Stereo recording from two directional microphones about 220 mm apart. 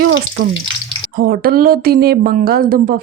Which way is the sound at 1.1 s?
40° right (ahead or behind).